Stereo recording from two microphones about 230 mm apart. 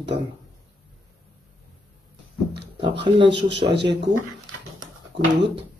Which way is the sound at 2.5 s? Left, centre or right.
Right.